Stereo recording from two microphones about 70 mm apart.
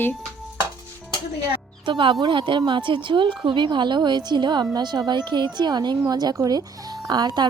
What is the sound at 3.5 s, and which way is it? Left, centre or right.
A woman's voice, right.